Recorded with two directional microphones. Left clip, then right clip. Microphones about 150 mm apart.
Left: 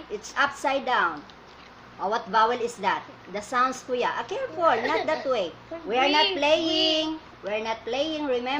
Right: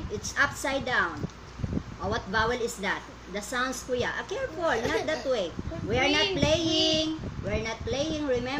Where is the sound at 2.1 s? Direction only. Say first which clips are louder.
Left 5 dB; 20° right (ahead or behind).